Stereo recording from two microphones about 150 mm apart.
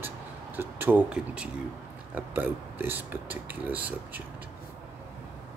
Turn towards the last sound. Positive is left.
turn(degrees=-10)  # may be behind; listen again after turning